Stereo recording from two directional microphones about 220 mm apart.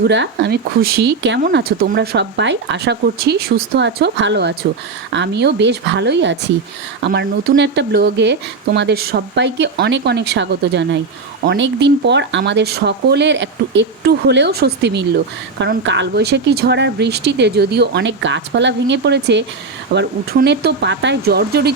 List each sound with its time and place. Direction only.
0.0 s speech: 55° right (ahead or behind)
1.4 s speech: 40° right (ahead or behind)